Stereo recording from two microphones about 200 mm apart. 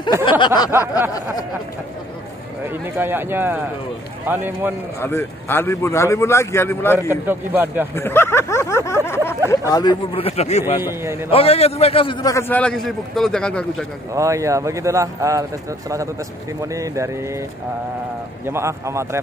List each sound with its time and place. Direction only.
0.2 s speech: 25° left (ahead or behind)
0.7 s speech: 10° right (ahead or behind)
2.7 s speech: 10° right (ahead or behind)
5.0 s a man's voice: 10° left (ahead or behind)
7.1 s speech: 10° right (ahead or behind)
7.9 s speech: 10° left (ahead or behind); by 10.6 s 30° left (ahead or behind)
10.8 s speech: 10° right (ahead or behind)
11.2 s a man's voice: 30° left (ahead or behind); by 13.8 s 5° left (ahead or behind)
14.1 s speech: 15° right (ahead or behind)
16.6 s speech: 15° right (ahead or behind)
18.4 s speech: 15° right (ahead or behind)